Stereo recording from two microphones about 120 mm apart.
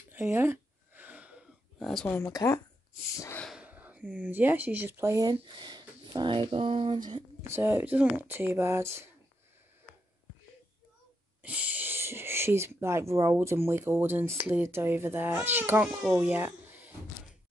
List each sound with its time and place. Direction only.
0.1 s a sound: 15° right (ahead or behind)
1.8 s speech: centre (ahead or behind)
2.2 s a woman's voice: 30° left (ahead or behind)
3.6 s speech: 15° right (ahead or behind); by 7.0 s 50° right (ahead or behind)
7.4 s speech: 20° right (ahead or behind)
11.4 s speech: 15° right (ahead or behind)